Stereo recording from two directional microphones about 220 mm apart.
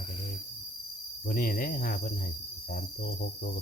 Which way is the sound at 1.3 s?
40° left (ahead or behind).